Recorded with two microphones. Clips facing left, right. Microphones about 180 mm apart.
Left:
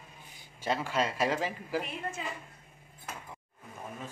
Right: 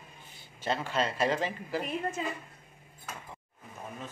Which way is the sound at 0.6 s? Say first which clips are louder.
Even; 10° left (ahead or behind).